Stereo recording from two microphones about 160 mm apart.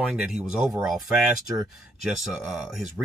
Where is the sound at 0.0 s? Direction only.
5° right (ahead or behind).